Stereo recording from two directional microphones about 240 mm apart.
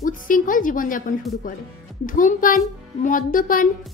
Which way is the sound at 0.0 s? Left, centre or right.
Left.